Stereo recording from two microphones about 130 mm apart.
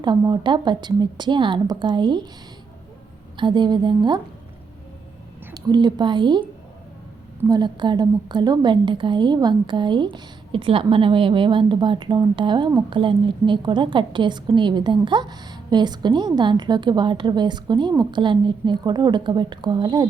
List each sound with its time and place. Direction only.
0.0 s a woman's voice: 35° right (ahead or behind)
3.3 s a woman's voice: 35° right (ahead or behind)
5.5 s a woman's voice: 35° right (ahead or behind)
7.4 s a woman's voice: 30° right (ahead or behind)